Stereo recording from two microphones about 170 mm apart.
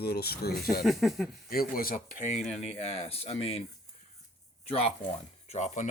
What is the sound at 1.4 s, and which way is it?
Speech, 60° left (ahead or behind).